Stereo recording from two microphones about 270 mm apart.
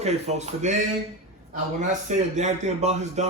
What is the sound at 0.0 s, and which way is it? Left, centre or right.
Speech, right.